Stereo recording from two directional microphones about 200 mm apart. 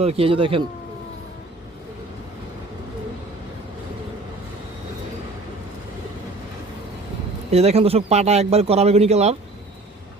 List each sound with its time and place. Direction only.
0.0 s speech: 30° right (ahead or behind)
7.5 s speech: 30° right (ahead or behind)